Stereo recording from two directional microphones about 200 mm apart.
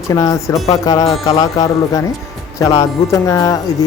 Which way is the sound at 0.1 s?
15° left (ahead or behind).